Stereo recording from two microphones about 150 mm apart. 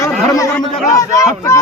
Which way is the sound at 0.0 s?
20° left (ahead or behind).